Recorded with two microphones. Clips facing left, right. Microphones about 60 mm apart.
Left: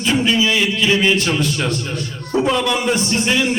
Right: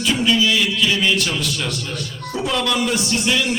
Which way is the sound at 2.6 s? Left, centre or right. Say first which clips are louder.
Left 2 dB; left.